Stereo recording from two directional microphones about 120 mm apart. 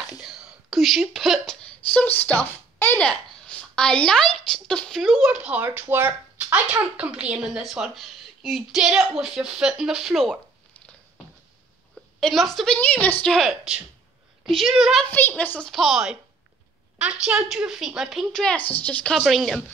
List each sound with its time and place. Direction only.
0.2 s speech: centre (ahead or behind)
12.2 s a woman's voice: 5° left (ahead or behind)
13.2 s a woman's voice: centre (ahead or behind)
15.0 s a woman's voice: 15° left (ahead or behind)
15.7 s a woman's voice: centre (ahead or behind)